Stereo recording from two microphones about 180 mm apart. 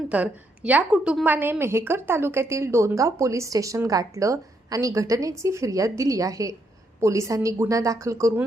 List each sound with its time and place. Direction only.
0.1 s a woman's voice: 5° right (ahead or behind)